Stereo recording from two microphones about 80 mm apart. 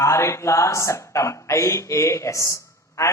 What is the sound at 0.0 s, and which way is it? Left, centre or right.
Speech, left.